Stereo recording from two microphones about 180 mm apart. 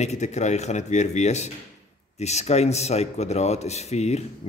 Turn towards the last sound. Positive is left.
turn(degrees=35)  # may be behind; listen again after turning